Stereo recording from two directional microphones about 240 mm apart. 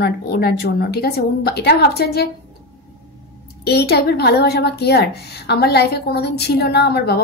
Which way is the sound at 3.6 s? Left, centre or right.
Left.